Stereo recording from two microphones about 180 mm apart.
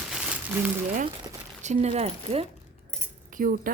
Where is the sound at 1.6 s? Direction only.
40° right (ahead or behind).